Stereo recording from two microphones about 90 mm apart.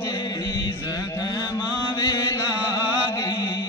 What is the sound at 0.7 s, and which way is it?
Mantra, 40° left (ahead or behind).